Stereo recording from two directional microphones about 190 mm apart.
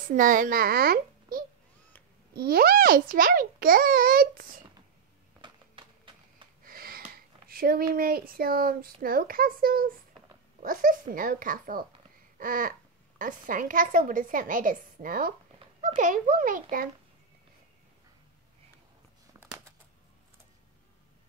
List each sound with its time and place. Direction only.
0.1 s a child's voice: 45° right (ahead or behind)
5.4 s a sound: 25° right (ahead or behind)
6.6 s a child's voice: 50° right (ahead or behind)